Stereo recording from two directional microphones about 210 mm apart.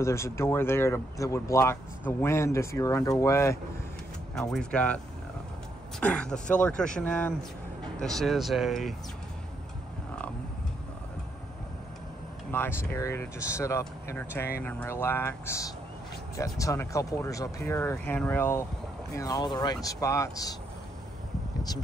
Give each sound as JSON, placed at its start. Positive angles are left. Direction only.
{"t": 0.0, "sound": "speech", "side_deg": 15}
{"t": 4.4, "sound": "speech", "side_deg": 5}
{"t": 12.4, "sound": "speech", "side_deg": 10}